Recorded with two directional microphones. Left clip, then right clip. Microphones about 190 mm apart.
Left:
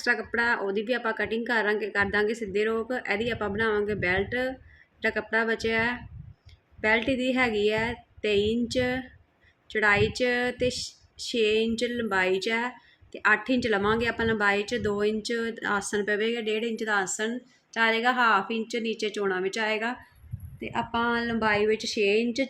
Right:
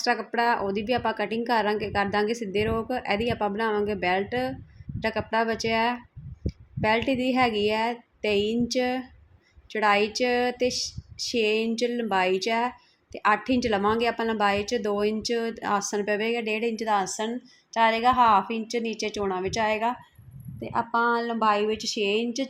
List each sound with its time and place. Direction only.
0.0 s a woman's voice: 15° right (ahead or behind)
21.0 s a woman's voice: 10° right (ahead or behind)